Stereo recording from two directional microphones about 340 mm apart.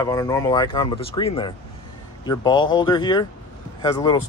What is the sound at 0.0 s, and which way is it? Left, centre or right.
Speech, centre.